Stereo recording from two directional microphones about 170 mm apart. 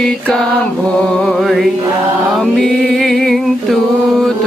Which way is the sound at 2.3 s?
Centre (ahead or behind).